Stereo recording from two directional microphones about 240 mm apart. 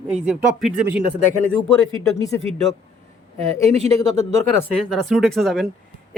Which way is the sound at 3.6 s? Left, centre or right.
Right.